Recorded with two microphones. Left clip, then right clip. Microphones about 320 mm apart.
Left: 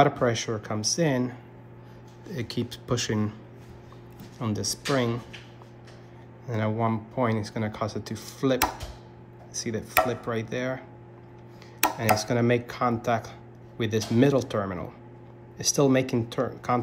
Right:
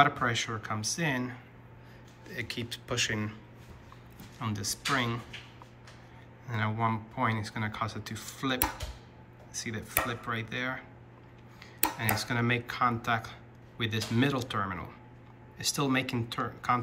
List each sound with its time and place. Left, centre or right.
0.0 s speech: centre
4.4 s speech: centre
6.4 s speech: centre